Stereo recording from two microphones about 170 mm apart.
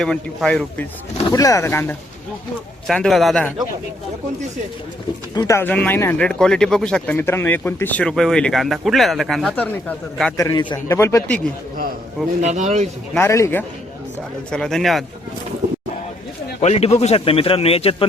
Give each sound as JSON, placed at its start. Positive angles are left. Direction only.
{"t": 0.0, "sound": "speech", "side_deg": 5}
{"t": 1.3, "sound": "speech", "side_deg": 20}
{"t": 2.8, "sound": "speech", "side_deg": 5}
{"t": 5.3, "sound": "speech", "side_deg": 20}
{"t": 10.3, "sound": "a man's voice", "side_deg": 20}
{"t": 10.9, "sound": "speech", "side_deg": 15}
{"t": 12.4, "sound": "speech", "side_deg": -45}
{"t": 13.1, "sound": "speech", "side_deg": 15}
{"t": 14.5, "sound": "speech", "side_deg": 5}
{"t": 16.6, "sound": "a man's voice", "side_deg": 40}